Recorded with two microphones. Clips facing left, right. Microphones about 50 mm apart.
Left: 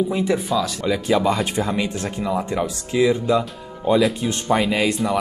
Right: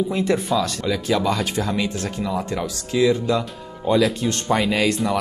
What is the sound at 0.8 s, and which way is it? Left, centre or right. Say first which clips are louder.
Speech: left 4 dB; centre.